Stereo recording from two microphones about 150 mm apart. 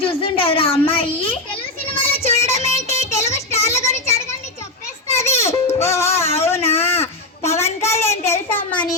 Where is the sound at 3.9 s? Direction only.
45° left (ahead or behind).